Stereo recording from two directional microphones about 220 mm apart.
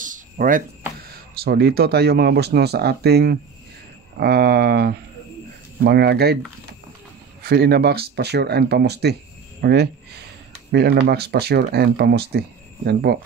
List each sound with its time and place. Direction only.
0.0 s speech: 35° right (ahead or behind)
7.4 s speech: 45° right (ahead or behind)